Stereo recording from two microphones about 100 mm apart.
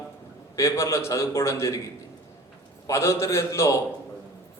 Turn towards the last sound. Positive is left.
turn(degrees=30)  # may be behind; listen again after turning